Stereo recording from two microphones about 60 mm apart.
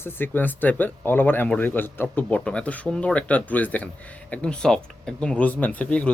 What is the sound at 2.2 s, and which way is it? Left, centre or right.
A man's voice, left.